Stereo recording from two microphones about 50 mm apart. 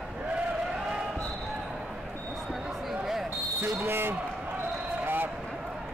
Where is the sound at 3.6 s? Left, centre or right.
Right.